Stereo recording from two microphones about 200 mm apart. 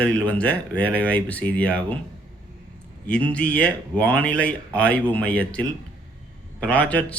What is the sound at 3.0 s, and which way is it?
Speech, 5° left (ahead or behind).